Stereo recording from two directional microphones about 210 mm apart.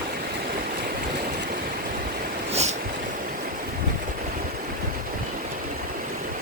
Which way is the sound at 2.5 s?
30° right (ahead or behind).